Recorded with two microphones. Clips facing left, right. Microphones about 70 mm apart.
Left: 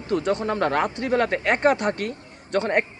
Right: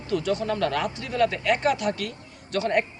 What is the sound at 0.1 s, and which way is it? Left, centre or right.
Speech, left.